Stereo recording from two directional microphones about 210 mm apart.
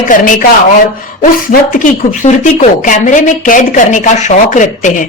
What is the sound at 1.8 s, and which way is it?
A woman's voice, 35° left (ahead or behind).